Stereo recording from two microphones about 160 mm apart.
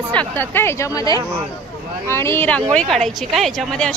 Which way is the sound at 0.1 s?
10° left (ahead or behind).